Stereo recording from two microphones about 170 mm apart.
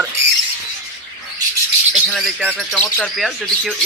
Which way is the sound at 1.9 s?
Centre (ahead or behind).